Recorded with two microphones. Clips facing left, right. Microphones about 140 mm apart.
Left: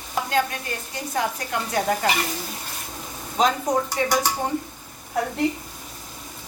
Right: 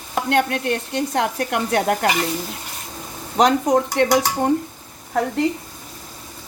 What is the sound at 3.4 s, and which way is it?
Speech, 70° right (ahead or behind).